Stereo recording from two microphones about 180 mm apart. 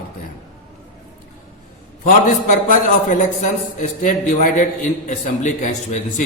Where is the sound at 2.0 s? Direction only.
45° left (ahead or behind).